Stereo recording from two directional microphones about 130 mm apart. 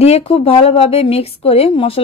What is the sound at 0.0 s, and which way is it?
Speech, 50° left (ahead or behind).